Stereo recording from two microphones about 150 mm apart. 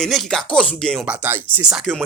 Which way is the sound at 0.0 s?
Centre (ahead or behind).